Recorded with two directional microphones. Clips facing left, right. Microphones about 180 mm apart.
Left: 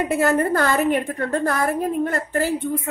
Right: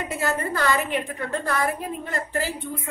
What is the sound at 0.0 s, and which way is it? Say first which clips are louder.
A woman's voice: left 8 dB; 55° left (ahead or behind).